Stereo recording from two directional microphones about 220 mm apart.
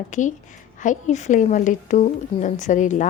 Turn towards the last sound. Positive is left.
turn(degrees=35)  # may be behind; listen again after turning